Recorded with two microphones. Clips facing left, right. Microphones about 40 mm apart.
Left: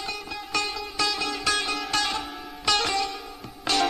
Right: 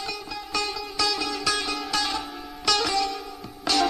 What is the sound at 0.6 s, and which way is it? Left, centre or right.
Music, left.